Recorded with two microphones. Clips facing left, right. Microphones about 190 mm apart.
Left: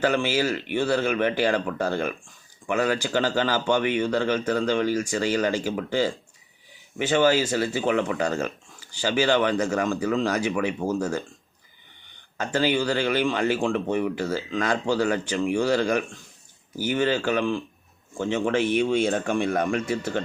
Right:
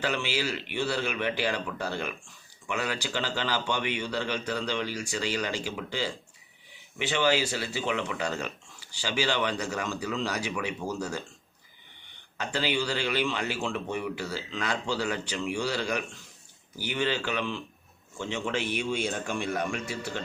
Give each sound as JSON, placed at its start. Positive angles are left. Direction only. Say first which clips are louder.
{"t": 0.0, "sound": "speech", "louder": "left 7 dB", "side_deg": 45}
{"t": 12.4, "sound": "speech", "louder": "left 6 dB", "side_deg": 45}